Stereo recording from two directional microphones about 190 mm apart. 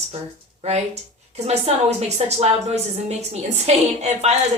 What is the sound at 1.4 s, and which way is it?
A woman's voice, 35° right (ahead or behind).